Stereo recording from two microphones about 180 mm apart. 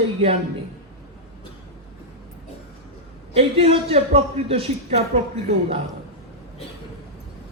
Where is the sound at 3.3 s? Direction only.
35° right (ahead or behind).